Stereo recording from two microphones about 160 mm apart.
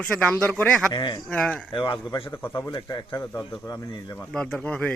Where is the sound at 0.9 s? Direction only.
30° left (ahead or behind).